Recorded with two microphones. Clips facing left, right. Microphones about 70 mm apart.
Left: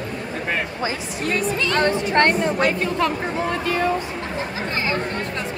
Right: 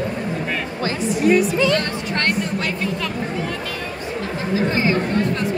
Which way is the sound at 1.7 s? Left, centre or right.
Left.